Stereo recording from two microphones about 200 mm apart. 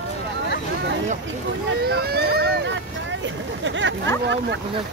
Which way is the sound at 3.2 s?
70° right (ahead or behind).